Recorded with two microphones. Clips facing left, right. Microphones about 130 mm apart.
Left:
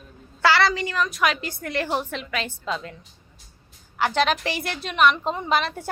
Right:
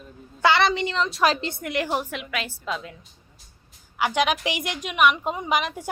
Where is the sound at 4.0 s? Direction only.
10° right (ahead or behind).